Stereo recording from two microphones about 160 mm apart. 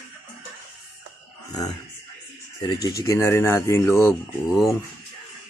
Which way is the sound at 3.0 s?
15° left (ahead or behind).